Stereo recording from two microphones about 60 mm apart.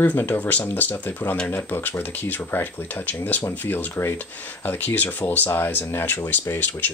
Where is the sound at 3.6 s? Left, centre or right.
Left.